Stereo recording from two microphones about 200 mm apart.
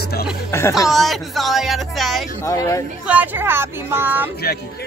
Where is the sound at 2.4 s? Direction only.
15° left (ahead or behind).